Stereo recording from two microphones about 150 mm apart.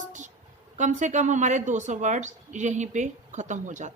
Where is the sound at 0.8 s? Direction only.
55° right (ahead or behind).